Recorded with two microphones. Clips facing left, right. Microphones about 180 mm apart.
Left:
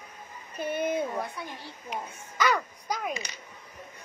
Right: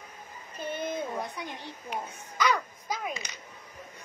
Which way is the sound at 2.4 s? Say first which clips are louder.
Left 1 dB; centre (ahead or behind).